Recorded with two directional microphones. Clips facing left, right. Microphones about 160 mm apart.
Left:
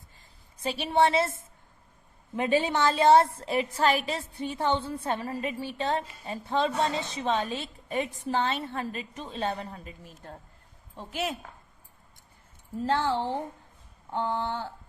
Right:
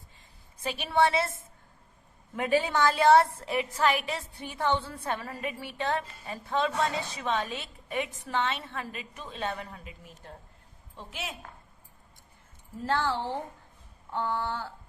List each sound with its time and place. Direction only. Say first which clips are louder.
0.6 s a woman's voice: left 2 dB; 30° left (ahead or behind)
12.8 s a woman's voice: left 2 dB; 20° left (ahead or behind)